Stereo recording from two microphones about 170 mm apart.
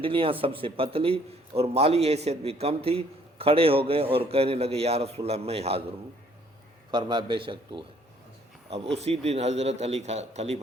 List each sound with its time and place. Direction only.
0.0 s a man's voice: 30° right (ahead or behind)
6.9 s a man's voice: 25° right (ahead or behind)